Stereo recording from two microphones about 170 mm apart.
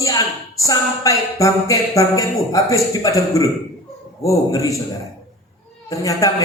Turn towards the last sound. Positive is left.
turn(degrees=20)  # may be behind; listen again after turning